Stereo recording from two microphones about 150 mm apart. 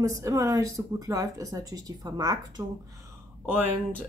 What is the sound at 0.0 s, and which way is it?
Speech, 20° right (ahead or behind).